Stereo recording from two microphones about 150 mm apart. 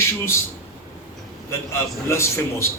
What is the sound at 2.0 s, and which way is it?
Speech, 15° left (ahead or behind).